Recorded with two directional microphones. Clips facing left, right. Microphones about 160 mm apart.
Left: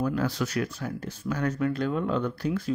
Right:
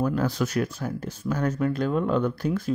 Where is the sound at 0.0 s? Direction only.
45° right (ahead or behind).